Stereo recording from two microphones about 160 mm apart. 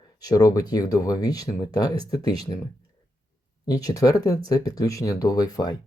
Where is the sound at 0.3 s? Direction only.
25° left (ahead or behind).